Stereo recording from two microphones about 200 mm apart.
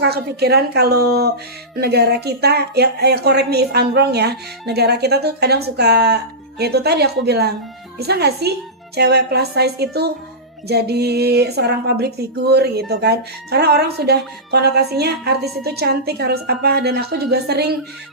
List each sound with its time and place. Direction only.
0.0 s speech: 55° right (ahead or behind)